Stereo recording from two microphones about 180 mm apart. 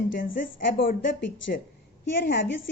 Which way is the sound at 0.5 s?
50° left (ahead or behind).